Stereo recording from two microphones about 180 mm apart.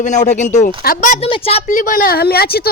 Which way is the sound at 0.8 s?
55° left (ahead or behind).